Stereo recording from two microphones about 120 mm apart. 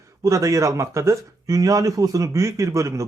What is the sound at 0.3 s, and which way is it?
A man's voice, 25° right (ahead or behind).